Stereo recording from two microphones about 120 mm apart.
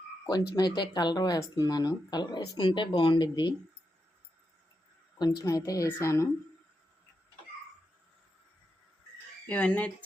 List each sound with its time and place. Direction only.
0.3 s speech: 35° left (ahead or behind)
5.2 s a woman's voice: 30° left (ahead or behind)
9.5 s speech: 10° left (ahead or behind)